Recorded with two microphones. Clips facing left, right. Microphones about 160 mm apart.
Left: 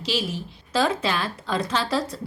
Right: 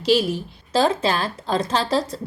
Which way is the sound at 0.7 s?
35° right (ahead or behind).